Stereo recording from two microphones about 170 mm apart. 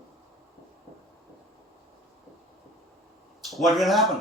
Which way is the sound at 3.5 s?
Centre (ahead or behind).